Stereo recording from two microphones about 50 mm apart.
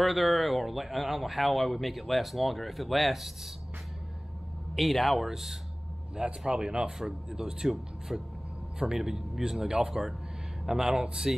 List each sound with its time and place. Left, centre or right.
0.0 s speech: centre
4.7 s a man's voice: centre; by 6.9 s right
7.0 s speech: centre